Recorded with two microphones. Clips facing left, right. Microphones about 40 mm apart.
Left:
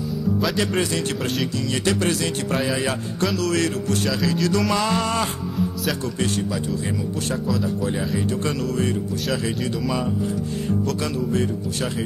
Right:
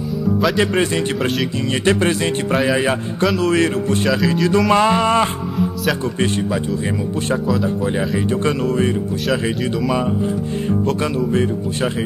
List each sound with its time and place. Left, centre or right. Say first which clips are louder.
1.9 s speech: right 6 dB; right
2.6 s music: right 6 dB; right
4.6 s speech: right 7 dB; right
7.6 s speech: right 5 dB; right
9.9 s music: right 5 dB; right